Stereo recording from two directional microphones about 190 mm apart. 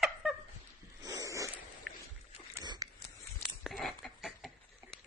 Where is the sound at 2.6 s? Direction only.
20° right (ahead or behind).